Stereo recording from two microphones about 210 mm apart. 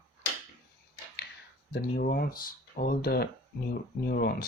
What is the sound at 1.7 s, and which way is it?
Speech, 45° left (ahead or behind).